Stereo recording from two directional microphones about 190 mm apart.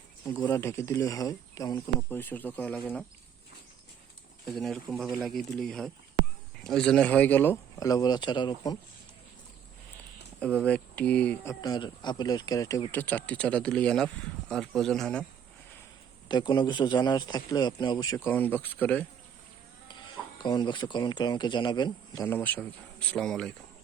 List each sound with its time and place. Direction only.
0.3 s speech: 10° left (ahead or behind)
4.4 s speech: centre (ahead or behind); by 8.8 s 20° left (ahead or behind)
10.4 s speech: 5° left (ahead or behind)
11.6 s speech: 20° left (ahead or behind); by 15.2 s 5° left (ahead or behind)
16.3 s a man's voice: 25° left (ahead or behind)
19.9 s speech: 25° left (ahead or behind); by 23.6 s 5° left (ahead or behind)